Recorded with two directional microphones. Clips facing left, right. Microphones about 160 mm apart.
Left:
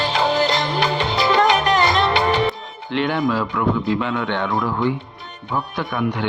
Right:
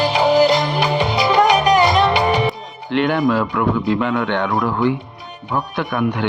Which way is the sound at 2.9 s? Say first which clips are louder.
Right 4 dB; 55° right (ahead or behind).